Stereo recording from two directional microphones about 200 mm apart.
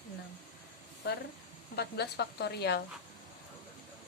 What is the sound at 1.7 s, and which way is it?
A woman's voice, 55° left (ahead or behind).